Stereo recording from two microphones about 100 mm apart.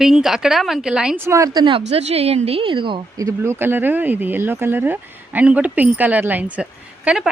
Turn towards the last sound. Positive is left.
turn(degrees=-5)  # may be behind; listen again after turning